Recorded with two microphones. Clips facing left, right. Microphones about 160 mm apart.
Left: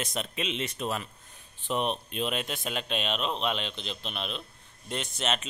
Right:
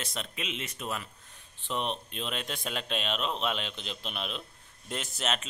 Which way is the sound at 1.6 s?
10° left (ahead or behind).